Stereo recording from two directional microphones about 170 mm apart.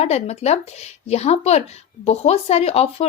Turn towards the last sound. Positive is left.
turn(degrees=35)  # may be behind; listen again after turning